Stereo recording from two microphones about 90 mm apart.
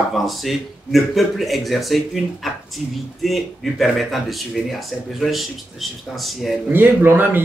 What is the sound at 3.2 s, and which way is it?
A man's voice, centre (ahead or behind).